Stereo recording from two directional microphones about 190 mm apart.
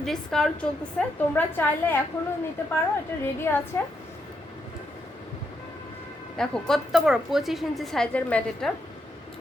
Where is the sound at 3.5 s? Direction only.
10° left (ahead or behind).